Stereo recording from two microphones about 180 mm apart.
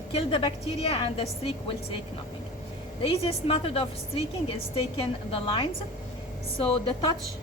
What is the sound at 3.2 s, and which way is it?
A woman's voice, 30° left (ahead or behind).